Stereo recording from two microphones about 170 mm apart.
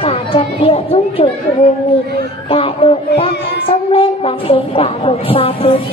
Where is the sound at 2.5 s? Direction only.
35° left (ahead or behind).